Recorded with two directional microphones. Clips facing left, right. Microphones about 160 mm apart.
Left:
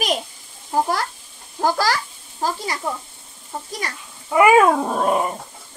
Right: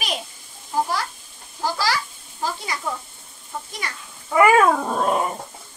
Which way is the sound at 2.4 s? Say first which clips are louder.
Left 3 dB; 35° left (ahead or behind).